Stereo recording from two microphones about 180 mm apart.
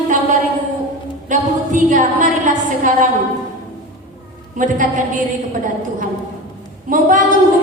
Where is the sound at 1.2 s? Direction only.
45° right (ahead or behind).